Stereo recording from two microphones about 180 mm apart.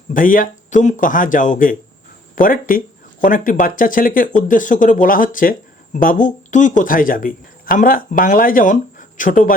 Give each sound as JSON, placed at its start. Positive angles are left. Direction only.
{"t": 0.1, "sound": "speech", "side_deg": 50}